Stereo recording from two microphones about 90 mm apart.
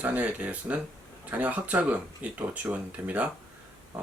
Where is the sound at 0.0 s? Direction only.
15° right (ahead or behind).